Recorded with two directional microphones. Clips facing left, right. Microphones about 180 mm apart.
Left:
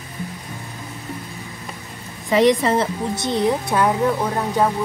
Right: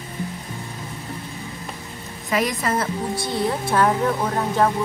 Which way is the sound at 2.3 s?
25° left (ahead or behind).